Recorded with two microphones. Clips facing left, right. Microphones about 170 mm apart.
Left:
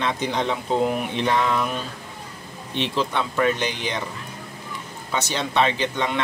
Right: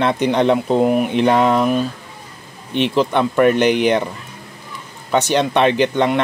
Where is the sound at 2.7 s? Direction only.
60° right (ahead or behind).